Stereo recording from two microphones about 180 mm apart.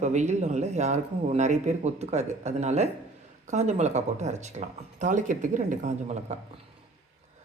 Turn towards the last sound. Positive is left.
turn(degrees=-40)  # may be behind; listen again after turning